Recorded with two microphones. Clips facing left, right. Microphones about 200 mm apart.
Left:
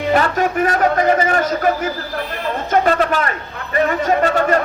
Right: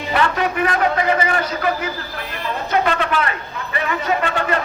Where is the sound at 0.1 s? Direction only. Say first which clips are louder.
Left 2 dB; 45° left (ahead or behind).